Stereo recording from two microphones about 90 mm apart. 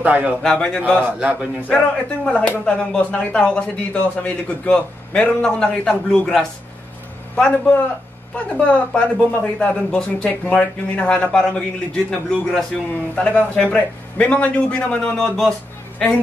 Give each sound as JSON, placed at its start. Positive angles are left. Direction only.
{"t": 0.0, "sound": "a man's voice", "side_deg": -15}
{"t": 0.4, "sound": "speech", "side_deg": 10}
{"t": 1.2, "sound": "a man's voice", "side_deg": -10}
{"t": 1.6, "sound": "speech", "side_deg": 15}